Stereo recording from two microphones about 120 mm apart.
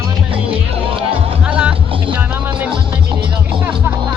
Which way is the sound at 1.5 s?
10° right (ahead or behind).